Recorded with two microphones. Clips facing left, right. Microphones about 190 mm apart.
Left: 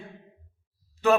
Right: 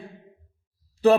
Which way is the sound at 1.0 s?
35° right (ahead or behind).